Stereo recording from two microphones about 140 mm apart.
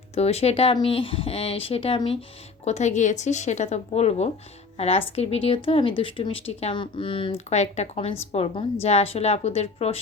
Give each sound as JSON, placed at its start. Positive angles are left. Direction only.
{"t": 0.1, "sound": "speech", "side_deg": 50}
{"t": 2.6, "sound": "speech", "side_deg": 55}